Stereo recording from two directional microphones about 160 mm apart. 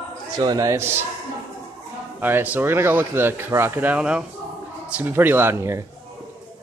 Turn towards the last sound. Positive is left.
turn(degrees=-15)  # may be behind; listen again after turning